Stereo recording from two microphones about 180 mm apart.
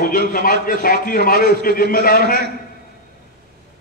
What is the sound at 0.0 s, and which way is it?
A man's voice, 55° left (ahead or behind).